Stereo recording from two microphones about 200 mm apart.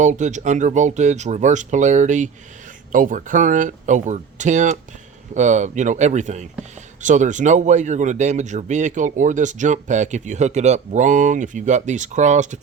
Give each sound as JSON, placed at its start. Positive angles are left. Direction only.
{"t": 0.0, "sound": "speech", "side_deg": -35}